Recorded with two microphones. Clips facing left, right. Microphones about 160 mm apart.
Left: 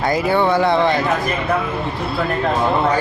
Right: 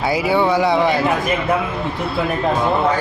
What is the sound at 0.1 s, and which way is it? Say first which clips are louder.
Speech: even; 10° right (ahead or behind).